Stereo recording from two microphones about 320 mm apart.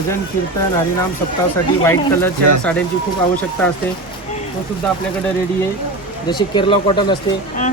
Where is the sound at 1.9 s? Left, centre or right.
Centre.